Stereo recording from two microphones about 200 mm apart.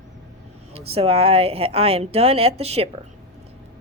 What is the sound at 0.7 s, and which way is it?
Speech, 30° right (ahead or behind).